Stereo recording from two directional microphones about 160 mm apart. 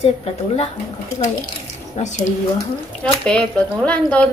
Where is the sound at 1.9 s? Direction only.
50° left (ahead or behind).